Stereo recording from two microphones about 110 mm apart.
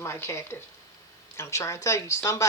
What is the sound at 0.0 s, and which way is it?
Speech, 25° left (ahead or behind).